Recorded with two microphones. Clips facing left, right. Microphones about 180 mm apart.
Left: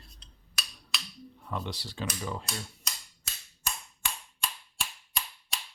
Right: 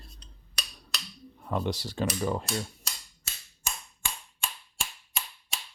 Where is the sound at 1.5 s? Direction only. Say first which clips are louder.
Right 6 dB; 45° right (ahead or behind).